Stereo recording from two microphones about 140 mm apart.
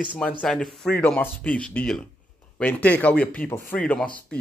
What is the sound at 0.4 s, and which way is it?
Speech, 5° left (ahead or behind).